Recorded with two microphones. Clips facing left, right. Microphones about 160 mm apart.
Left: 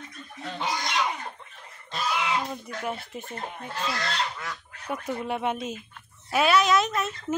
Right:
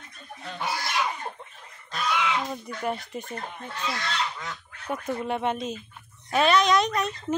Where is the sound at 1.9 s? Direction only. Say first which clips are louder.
Right 1 dB; 30° left (ahead or behind).